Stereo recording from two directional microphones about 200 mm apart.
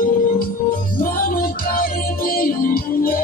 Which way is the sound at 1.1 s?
45° left (ahead or behind).